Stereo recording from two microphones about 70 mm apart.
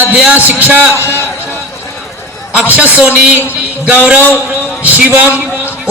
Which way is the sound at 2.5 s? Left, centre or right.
Right.